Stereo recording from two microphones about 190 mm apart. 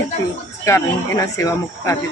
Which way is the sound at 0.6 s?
15° left (ahead or behind).